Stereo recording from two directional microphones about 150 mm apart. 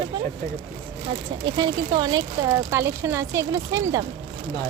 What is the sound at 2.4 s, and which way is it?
Speech, 20° right (ahead or behind).